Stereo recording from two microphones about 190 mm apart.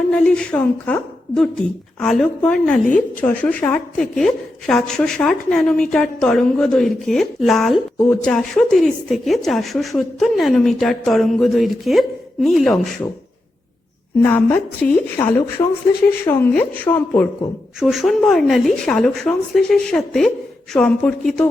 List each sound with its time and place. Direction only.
0.1 s a woman's voice: 5° left (ahead or behind)
14.3 s speech: 10° left (ahead or behind)
17.7 s a woman's voice: centre (ahead or behind)